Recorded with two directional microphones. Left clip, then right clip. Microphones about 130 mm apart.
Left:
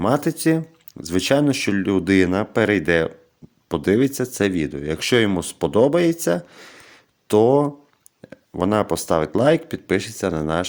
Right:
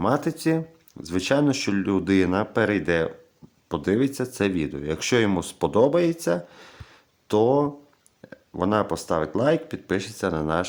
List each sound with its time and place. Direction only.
0.0 s speech: 30° left (ahead or behind)